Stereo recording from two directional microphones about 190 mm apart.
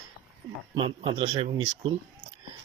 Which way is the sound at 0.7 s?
25° right (ahead or behind).